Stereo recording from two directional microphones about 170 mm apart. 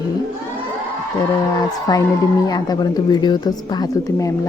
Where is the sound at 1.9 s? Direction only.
25° left (ahead or behind).